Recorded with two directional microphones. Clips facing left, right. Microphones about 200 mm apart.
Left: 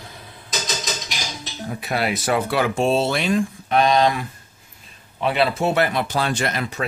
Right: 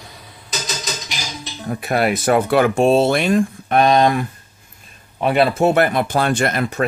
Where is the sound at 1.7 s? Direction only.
50° right (ahead or behind).